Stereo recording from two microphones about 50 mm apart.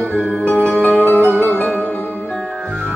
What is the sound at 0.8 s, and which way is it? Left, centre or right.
Music, left.